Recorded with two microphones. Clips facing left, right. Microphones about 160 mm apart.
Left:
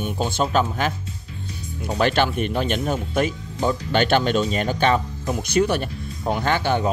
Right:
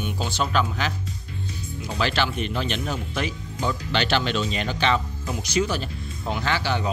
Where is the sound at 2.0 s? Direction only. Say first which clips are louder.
Left 5 dB; 50° left (ahead or behind).